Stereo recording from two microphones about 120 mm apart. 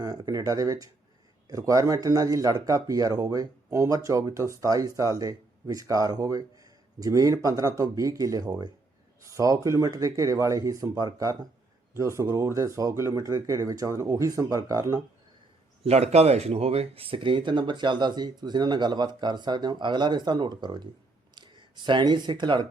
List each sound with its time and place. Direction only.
0.0 s speech: 30° right (ahead or behind)
15.8 s speech: 60° right (ahead or behind); by 22.6 s 40° right (ahead or behind)